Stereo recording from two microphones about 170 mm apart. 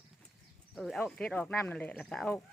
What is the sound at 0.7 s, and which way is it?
Speech, centre (ahead or behind).